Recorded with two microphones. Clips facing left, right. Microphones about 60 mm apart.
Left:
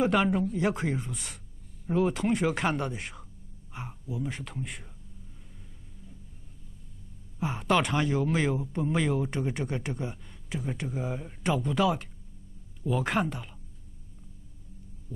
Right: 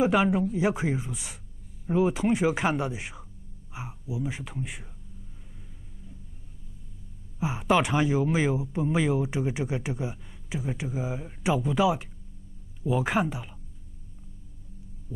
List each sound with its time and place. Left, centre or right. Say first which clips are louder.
0.0 s speech: right 2 dB; centre
7.3 s speech: right 2 dB; centre